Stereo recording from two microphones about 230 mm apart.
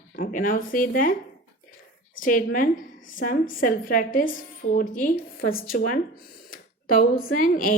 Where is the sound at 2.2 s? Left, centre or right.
Left.